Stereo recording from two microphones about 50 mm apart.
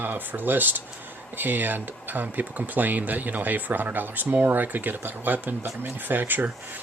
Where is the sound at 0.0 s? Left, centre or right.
Right.